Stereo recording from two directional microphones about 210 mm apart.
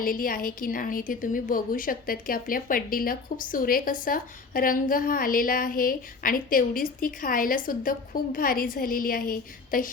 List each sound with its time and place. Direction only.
0.0 s a woman's voice: 45° left (ahead or behind)